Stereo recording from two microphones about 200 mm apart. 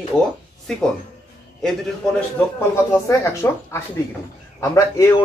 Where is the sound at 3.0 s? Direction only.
15° left (ahead or behind).